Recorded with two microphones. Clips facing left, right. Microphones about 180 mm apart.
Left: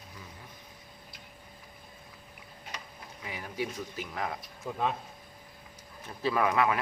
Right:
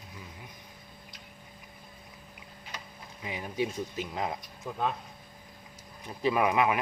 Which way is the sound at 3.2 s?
20° right (ahead or behind).